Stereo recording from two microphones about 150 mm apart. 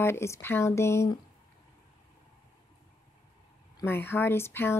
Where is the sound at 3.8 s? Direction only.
15° left (ahead or behind).